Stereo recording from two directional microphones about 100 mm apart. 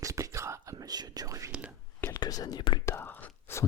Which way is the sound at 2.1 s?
40° left (ahead or behind).